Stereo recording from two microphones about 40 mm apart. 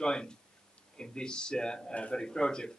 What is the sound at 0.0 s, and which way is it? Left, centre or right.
Speech, centre.